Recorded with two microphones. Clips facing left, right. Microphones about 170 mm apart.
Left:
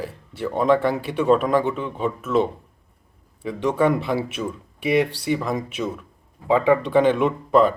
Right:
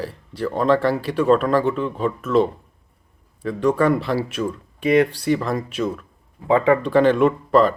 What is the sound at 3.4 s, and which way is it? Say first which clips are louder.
Speech: right 2 dB; 20° left (ahead or behind).